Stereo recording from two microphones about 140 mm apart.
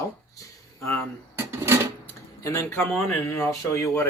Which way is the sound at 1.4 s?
20° right (ahead or behind).